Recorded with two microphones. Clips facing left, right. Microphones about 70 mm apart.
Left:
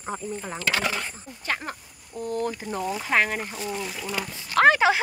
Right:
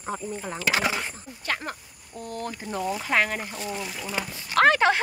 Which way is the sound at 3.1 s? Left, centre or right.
Left.